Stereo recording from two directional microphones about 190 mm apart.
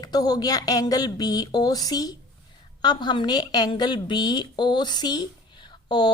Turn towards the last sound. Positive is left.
turn(degrees=25)  # may be behind; listen again after turning